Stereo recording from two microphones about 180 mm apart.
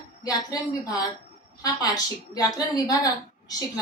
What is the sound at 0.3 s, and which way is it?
A woman's voice, 20° left (ahead or behind).